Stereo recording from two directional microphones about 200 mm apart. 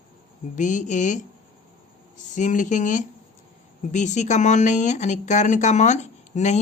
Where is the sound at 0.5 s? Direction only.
40° left (ahead or behind).